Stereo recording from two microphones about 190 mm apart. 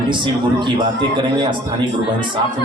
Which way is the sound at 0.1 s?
25° right (ahead or behind).